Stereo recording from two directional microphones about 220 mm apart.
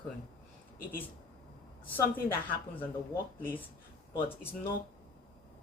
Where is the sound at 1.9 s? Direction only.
10° left (ahead or behind).